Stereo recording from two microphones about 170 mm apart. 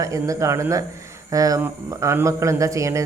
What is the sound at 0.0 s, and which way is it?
Speech, 20° right (ahead or behind).